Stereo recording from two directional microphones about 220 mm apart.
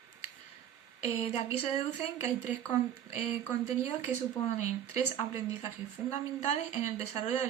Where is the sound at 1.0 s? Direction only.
30° left (ahead or behind).